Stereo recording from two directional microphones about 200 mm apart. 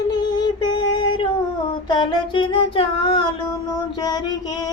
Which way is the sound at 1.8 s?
20° left (ahead or behind).